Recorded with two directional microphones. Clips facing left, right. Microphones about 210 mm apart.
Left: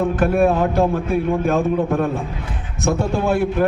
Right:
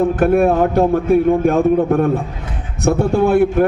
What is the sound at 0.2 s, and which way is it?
A man's voice, 50° right (ahead or behind).